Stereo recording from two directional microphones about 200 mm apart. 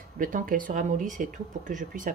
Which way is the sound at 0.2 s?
45° right (ahead or behind).